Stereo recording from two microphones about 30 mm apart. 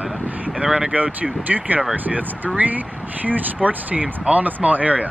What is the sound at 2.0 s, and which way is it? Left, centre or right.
Speech, right.